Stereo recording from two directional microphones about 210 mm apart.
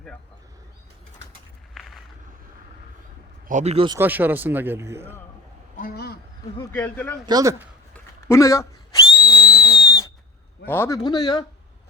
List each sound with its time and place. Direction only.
3.5 s a man's voice: 30° right (ahead or behind)
3.9 s a man's voice: 10° right (ahead or behind)
5.7 s a sound: 45° left (ahead or behind)
6.6 s speech: 10° left (ahead or behind)
7.3 s a man's voice: 15° right (ahead or behind)
7.9 s whistle: 15° left (ahead or behind)
10.7 s speech: 15° left (ahead or behind)